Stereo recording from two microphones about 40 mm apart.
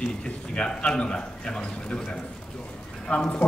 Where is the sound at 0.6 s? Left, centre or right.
Left.